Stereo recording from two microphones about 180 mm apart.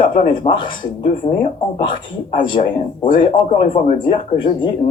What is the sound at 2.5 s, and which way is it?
Speech, 25° left (ahead or behind).